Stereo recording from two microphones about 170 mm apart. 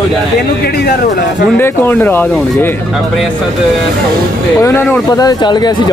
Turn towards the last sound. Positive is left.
turn(degrees=25)  # may be behind; listen again after turning